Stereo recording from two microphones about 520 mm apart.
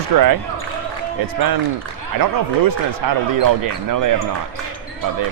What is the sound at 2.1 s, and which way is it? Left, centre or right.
Speech, right.